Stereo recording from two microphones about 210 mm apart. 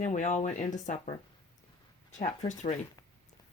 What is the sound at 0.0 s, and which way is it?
Speech, 35° left (ahead or behind).